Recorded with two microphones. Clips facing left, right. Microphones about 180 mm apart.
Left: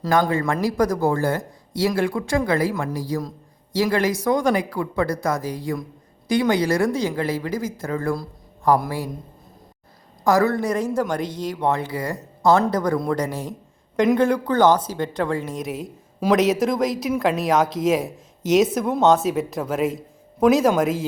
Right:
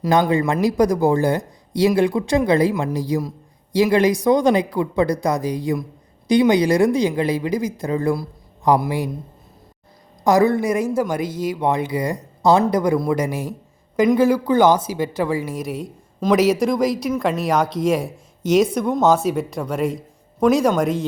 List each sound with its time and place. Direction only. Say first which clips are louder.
0.0 s speech: right 3 dB; 20° right (ahead or behind)
10.2 s speech: right 3 dB; 15° right (ahead or behind); by 21.0 s 5° left (ahead or behind)